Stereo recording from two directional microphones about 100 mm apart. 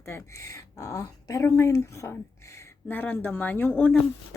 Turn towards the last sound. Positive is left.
turn(degrees=15)  # may be behind; listen again after turning